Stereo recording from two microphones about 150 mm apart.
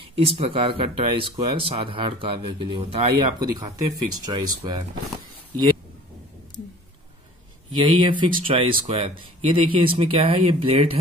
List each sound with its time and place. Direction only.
0.0 s speech: 40° right (ahead or behind)
7.8 s speech: 30° right (ahead or behind)